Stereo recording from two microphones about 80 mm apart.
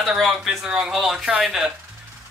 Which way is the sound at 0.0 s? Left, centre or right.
Centre.